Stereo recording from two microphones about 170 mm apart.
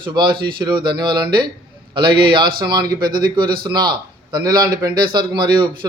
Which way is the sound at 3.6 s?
25° right (ahead or behind).